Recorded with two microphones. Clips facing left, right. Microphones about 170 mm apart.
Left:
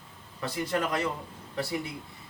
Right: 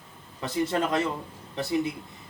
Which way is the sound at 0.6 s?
25° right (ahead or behind).